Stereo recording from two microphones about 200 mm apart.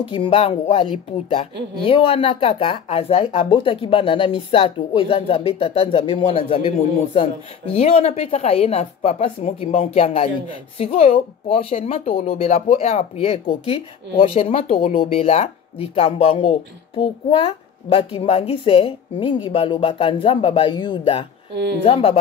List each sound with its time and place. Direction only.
0.0 s speech: 25° left (ahead or behind)